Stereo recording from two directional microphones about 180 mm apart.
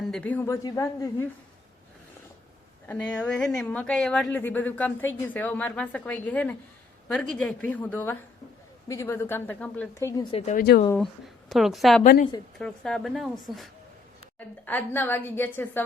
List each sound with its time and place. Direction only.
0.0 s a woman's voice: 5° left (ahead or behind)
2.8 s a woman's voice: 10° left (ahead or behind)
10.3 s a woman's voice: 40° left (ahead or behind)
10.6 s speech: 55° left (ahead or behind)
10.9 s speech: centre (ahead or behind)
12.0 s a woman's voice: 55° left (ahead or behind)
12.5 s speech: 5° left (ahead or behind)
14.3 s a woman's voice: 10° left (ahead or behind)